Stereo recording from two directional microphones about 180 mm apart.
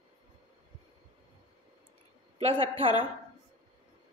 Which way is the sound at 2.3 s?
30° right (ahead or behind).